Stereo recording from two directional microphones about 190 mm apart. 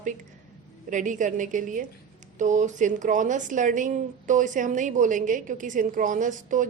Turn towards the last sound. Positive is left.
turn(degrees=-40)  # may be behind; listen again after turning